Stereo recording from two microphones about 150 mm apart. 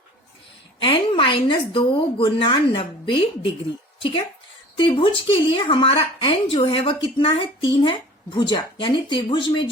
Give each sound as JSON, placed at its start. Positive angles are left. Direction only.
{"t": 0.8, "sound": "a woman's voice", "side_deg": 35}
{"t": 4.8, "sound": "a woman's voice", "side_deg": 35}